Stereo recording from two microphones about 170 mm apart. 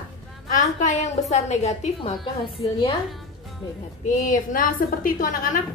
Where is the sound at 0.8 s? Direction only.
45° left (ahead or behind).